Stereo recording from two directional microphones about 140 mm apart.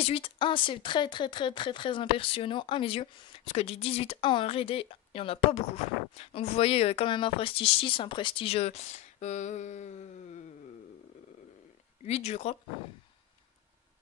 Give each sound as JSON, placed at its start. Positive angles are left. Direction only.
{"t": 0.0, "sound": "speech", "side_deg": 40}
{"t": 12.0, "sound": "speech", "side_deg": 50}